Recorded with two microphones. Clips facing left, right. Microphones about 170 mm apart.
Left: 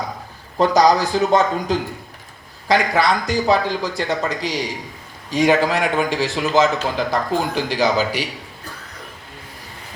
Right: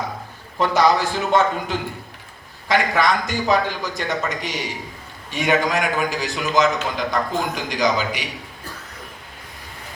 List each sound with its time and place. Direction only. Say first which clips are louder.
0.6 s a man's voice: left 3 dB; 35° left (ahead or behind)